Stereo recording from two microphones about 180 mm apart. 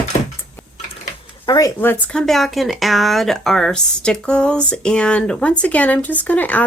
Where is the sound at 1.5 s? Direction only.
20° left (ahead or behind).